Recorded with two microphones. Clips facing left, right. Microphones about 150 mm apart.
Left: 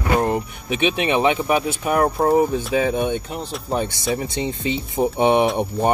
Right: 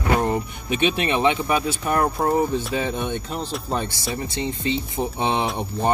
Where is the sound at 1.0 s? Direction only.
15° left (ahead or behind).